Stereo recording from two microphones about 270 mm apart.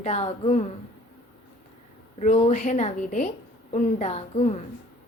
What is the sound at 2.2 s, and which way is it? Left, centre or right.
A woman's voice, left.